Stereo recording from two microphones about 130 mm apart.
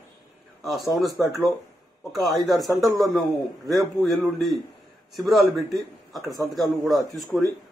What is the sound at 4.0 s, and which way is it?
A man's voice, centre (ahead or behind).